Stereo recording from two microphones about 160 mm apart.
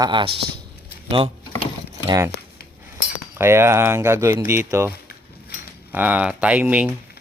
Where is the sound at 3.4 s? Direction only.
15° right (ahead or behind).